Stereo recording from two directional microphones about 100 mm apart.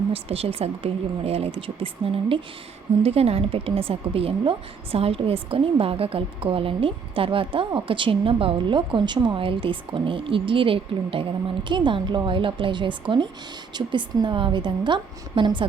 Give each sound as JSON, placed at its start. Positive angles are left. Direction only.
{"t": 0.1, "sound": "speech", "side_deg": -80}
{"t": 3.0, "sound": "a woman's voice", "side_deg": -85}